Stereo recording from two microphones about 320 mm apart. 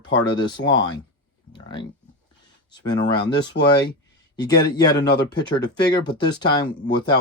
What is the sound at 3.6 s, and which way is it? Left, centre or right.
Speech, left.